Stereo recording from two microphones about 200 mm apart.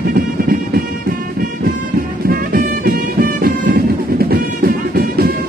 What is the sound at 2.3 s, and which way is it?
Music, 45° right (ahead or behind).